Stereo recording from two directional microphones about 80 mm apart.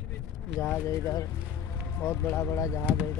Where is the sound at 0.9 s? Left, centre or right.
Left.